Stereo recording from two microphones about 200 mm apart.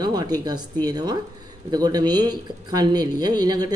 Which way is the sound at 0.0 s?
20° right (ahead or behind).